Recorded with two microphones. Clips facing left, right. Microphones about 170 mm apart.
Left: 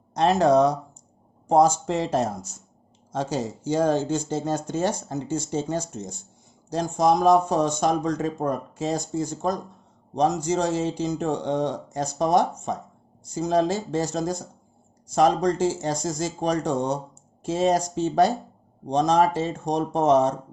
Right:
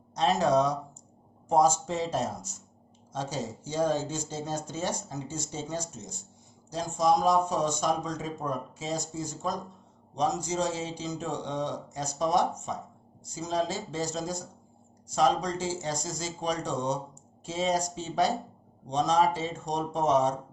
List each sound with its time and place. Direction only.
0.1 s speech: 60° left (ahead or behind)